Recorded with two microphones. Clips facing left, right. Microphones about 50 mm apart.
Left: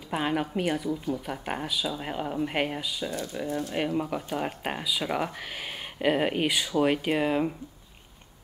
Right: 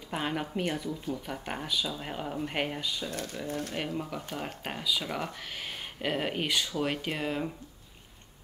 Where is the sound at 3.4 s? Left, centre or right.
Left.